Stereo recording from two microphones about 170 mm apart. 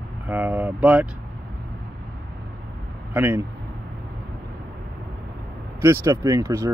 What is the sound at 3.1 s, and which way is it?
Speech, 15° right (ahead or behind).